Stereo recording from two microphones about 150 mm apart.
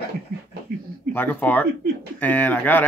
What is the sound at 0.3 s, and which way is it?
Beatboxing, 80° right.